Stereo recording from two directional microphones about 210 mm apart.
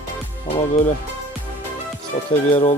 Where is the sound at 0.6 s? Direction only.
35° left (ahead or behind).